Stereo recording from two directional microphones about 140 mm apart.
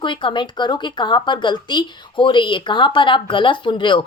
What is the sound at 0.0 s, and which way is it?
Speech, 35° left (ahead or behind).